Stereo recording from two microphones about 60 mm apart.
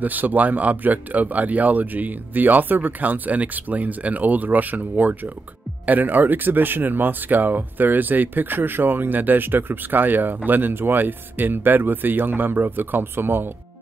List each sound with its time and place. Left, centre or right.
0.0 s speech: right